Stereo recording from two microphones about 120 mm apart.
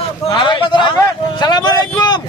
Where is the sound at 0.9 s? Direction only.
35° left (ahead or behind).